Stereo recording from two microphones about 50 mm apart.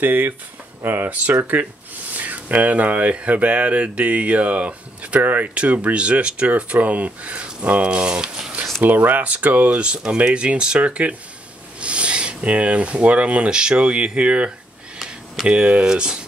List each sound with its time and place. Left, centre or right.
0.0 s speech: right; by 8.5 s centre
8.8 s speech: right; by 16.2 s centre